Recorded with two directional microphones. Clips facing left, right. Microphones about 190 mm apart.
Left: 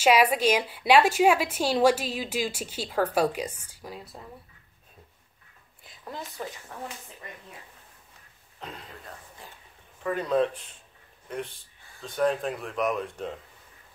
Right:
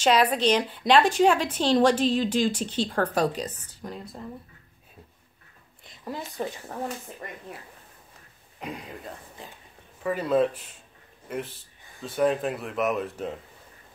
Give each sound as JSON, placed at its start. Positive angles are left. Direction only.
{"t": 0.0, "sound": "a woman's voice", "side_deg": 10}
{"t": 5.9, "sound": "a sound", "side_deg": -5}
{"t": 6.3, "sound": "speech", "side_deg": -30}
{"t": 8.5, "sound": "speech", "side_deg": -10}
{"t": 10.0, "sound": "speech", "side_deg": -5}